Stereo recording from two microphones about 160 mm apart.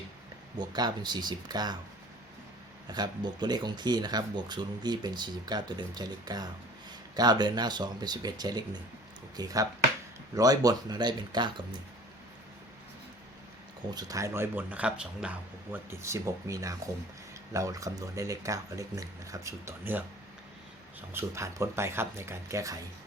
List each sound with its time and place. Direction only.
0.6 s speech: 25° right (ahead or behind)
2.9 s speech: 25° right (ahead or behind)
13.9 s speech: 20° right (ahead or behind)
21.1 s speech: 15° right (ahead or behind)